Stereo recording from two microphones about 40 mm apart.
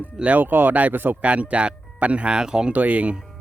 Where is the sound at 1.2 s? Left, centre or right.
Right.